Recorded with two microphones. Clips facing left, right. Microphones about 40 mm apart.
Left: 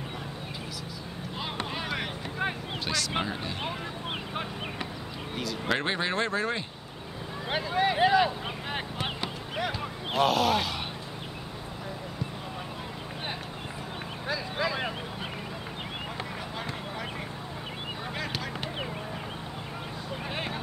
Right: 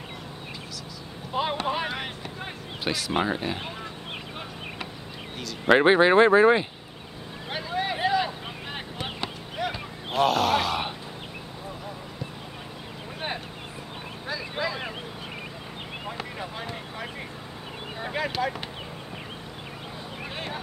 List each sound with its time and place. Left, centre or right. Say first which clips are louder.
1.3 s speech: right 8 dB; centre
5.7 s speech: right 12 dB; right
7.4 s vehicle: left 2 dB; centre
9.2 s a sound: right 1 dB; centre
14.2 s vehicle: even; centre
18.0 s a sound: right 9 dB; centre